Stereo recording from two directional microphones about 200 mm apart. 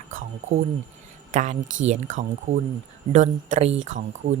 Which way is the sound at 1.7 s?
75° right (ahead or behind).